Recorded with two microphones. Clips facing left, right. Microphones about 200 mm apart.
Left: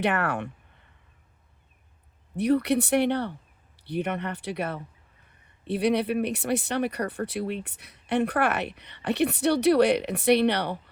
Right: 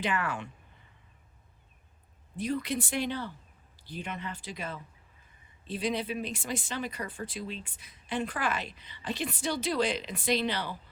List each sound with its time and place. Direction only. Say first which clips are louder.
0.0 s speech: left 6 dB; 65° left (ahead or behind)
2.3 s speech: left 9 dB; 65° left (ahead or behind)